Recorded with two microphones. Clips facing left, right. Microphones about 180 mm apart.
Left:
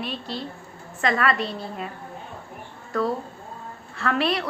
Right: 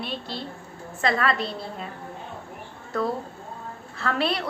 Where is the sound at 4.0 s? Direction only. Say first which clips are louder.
Left 2 dB; 30° right (ahead or behind).